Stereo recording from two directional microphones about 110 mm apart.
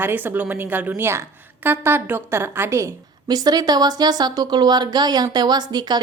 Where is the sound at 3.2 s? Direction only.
40° right (ahead or behind).